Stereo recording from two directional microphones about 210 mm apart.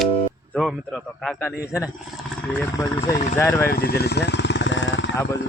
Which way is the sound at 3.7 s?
45° left (ahead or behind).